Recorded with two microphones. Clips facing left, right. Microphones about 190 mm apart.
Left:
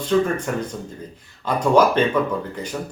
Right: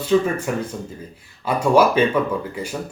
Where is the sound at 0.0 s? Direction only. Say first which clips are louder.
Right 1 dB; 10° right (ahead or behind).